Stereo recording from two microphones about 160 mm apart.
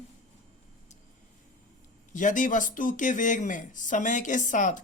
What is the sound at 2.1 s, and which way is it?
Speech, 50° left (ahead or behind).